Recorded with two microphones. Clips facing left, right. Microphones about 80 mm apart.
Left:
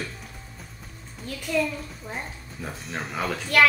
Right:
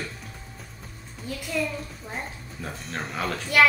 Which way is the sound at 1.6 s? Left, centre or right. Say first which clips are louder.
Left 3 dB; centre.